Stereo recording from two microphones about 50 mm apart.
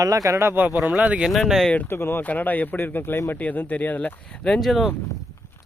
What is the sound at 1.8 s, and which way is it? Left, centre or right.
Speech, left.